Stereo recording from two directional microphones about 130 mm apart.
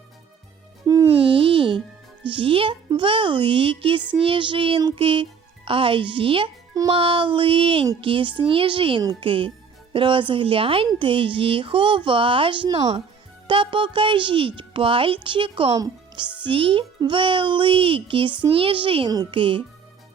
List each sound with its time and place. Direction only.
1.1 s music: 45° right (ahead or behind)
2.2 s a woman's voice: 40° right (ahead or behind)
4.2 s child singing: 40° right (ahead or behind)
4.8 s a woman's voice: 40° right (ahead or behind)